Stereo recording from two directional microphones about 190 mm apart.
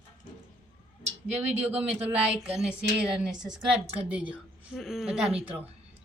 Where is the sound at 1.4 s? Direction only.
10° right (ahead or behind).